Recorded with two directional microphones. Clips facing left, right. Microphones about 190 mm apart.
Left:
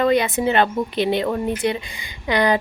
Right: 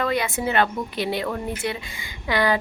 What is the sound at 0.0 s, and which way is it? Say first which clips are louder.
Speech: left 6 dB; 20° left (ahead or behind).